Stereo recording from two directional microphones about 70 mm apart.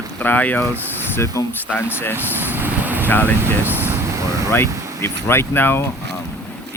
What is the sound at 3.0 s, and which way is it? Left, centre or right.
Speech, left.